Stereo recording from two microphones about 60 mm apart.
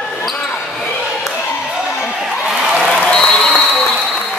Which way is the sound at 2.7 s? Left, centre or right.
Centre.